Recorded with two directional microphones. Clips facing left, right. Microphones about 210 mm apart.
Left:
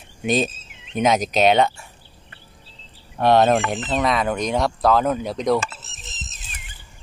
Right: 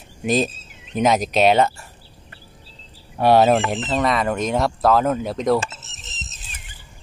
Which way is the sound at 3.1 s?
10° right (ahead or behind).